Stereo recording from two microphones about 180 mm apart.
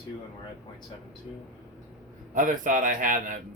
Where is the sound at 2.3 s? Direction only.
45° right (ahead or behind).